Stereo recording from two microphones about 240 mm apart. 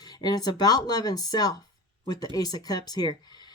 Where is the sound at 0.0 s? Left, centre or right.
Centre.